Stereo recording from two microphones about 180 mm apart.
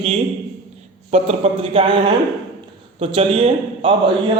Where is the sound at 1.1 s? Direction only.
35° right (ahead or behind).